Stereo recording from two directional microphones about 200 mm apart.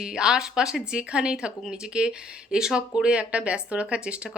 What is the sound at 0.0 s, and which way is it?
Speech, 5° right (ahead or behind).